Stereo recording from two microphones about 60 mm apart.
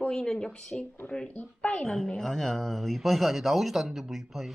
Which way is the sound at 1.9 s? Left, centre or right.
Centre.